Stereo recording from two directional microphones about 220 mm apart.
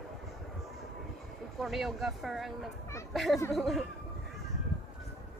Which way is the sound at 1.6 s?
Centre (ahead or behind).